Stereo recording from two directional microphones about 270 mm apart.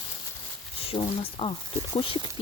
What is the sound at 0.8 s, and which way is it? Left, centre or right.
Speech, left.